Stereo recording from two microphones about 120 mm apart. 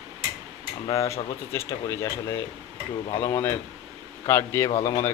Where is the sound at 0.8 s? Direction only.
25° left (ahead or behind).